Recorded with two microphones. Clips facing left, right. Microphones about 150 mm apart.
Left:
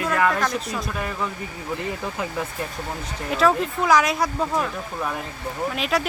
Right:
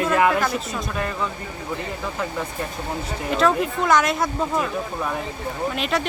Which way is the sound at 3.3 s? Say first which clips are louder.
Even; centre (ahead or behind).